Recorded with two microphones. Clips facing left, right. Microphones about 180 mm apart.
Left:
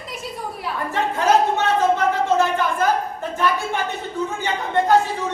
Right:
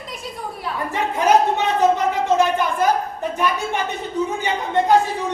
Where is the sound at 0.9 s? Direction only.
15° right (ahead or behind).